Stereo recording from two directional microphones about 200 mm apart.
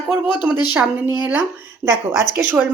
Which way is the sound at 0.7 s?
10° right (ahead or behind).